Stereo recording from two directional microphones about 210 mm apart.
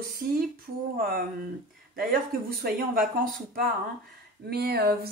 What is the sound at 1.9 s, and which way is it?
Speech, 45° right (ahead or behind).